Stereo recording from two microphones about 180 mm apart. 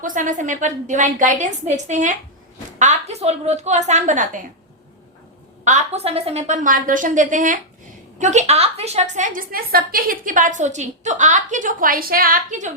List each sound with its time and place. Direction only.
0.0 s a woman's voice: 45° right (ahead or behind)
5.6 s a woman's voice: 40° right (ahead or behind)